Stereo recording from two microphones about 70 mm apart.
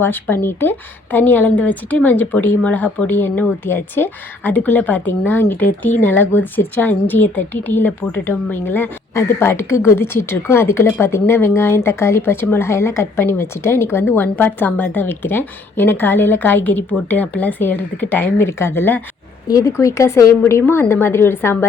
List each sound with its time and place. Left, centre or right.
0.0 s speech: left
19.5 s speech: left
19.7 s speech: left
20.4 s speech: left